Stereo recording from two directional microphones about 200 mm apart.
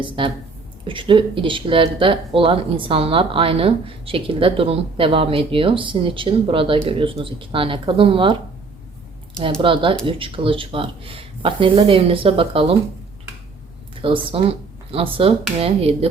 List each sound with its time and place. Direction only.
0.2 s speech: 25° right (ahead or behind)
9.4 s speech: 25° right (ahead or behind)
14.0 s speech: 25° right (ahead or behind)